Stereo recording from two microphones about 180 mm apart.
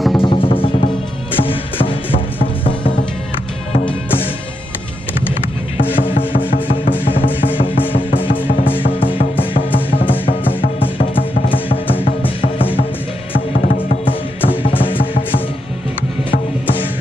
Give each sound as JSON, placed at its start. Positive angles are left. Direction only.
{"t": 0.1, "sound": "music", "side_deg": 30}
{"t": 6.1, "sound": "music", "side_deg": 50}
{"t": 7.4, "sound": "music", "side_deg": 30}
{"t": 9.4, "sound": "music", "side_deg": 30}
{"t": 11.1, "sound": "music", "side_deg": 30}
{"t": 13.6, "sound": "music", "side_deg": 50}
{"t": 14.6, "sound": "music", "side_deg": 30}